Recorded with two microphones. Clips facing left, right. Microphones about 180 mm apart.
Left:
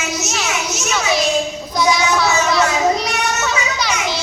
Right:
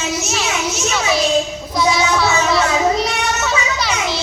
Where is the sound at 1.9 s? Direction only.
Centre (ahead or behind).